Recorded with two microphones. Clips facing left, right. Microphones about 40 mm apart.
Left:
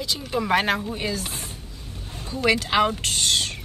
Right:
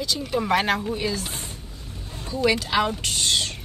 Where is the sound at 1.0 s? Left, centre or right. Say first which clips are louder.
Right 1 dB; left.